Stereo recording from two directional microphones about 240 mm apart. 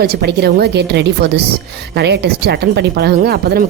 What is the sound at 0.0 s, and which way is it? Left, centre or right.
Speech, right.